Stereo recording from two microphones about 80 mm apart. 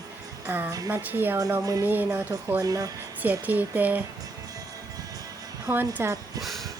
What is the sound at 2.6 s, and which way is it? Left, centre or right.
Music, right.